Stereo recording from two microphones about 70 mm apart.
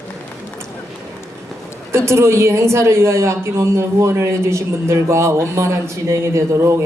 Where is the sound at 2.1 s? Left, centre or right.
Right.